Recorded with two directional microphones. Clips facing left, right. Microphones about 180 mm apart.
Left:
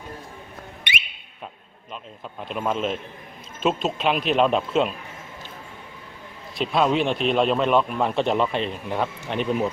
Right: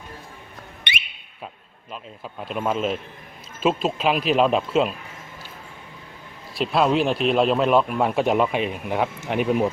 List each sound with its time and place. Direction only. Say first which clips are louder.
1.9 s a man's voice: right 1 dB; 5° right (ahead or behind)
6.6 s a man's voice: right 1 dB; 5° right (ahead or behind)